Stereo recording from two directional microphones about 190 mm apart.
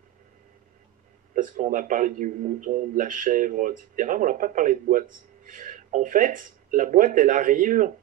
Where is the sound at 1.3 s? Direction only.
45° right (ahead or behind).